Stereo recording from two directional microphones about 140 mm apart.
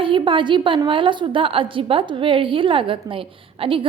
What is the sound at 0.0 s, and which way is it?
A woman's voice, 40° right (ahead or behind).